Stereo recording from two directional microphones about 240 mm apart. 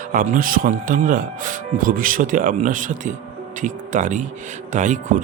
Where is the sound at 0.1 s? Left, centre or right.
Right.